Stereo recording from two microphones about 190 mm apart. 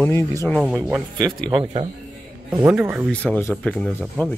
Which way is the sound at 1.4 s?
30° right (ahead or behind).